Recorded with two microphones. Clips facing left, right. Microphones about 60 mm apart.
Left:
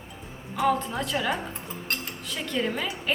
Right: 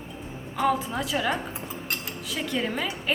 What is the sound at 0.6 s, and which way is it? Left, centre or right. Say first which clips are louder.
A woman's voice: even; centre.